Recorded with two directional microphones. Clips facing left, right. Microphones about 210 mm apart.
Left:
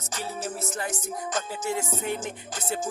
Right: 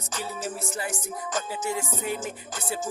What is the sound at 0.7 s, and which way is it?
Music, 10° right (ahead or behind).